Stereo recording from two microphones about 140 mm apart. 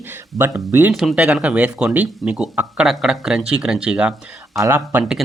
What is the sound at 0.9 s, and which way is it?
Speech, centre (ahead or behind).